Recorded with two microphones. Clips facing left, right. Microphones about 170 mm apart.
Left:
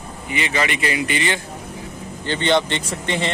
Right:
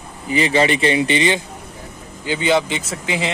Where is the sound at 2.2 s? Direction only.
5° right (ahead or behind).